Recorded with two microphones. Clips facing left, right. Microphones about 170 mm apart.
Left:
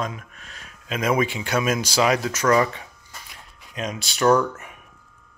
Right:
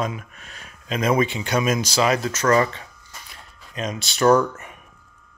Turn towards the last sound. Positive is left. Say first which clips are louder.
# right 2 dB
turn(degrees=10)  # may be behind; listen again after turning